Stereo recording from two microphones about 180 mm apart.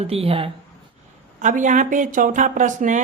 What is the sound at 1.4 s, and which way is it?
Speech, 45° right (ahead or behind).